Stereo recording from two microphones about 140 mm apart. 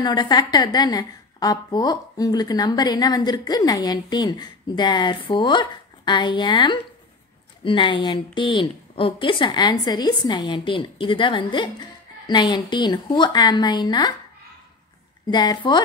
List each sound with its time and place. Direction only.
0.0 s a woman's voice: 30° left (ahead or behind)
15.2 s a woman's voice: 30° left (ahead or behind)